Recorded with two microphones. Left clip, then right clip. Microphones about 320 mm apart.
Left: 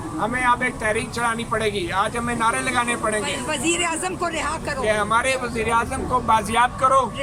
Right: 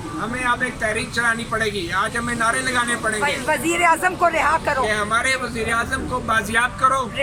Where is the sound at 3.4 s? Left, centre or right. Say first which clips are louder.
Right 3 dB; right.